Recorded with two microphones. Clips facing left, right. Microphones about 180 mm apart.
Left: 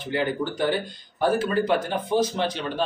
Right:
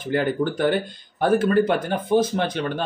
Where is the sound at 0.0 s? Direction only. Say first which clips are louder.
Right 4 dB; 50° right (ahead or behind).